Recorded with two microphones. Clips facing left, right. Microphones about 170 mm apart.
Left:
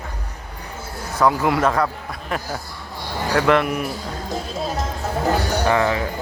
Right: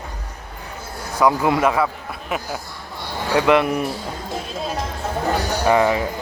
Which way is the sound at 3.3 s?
15° right (ahead or behind).